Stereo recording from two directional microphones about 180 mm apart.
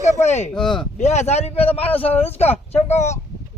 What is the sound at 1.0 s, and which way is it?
Speech, 40° left (ahead or behind).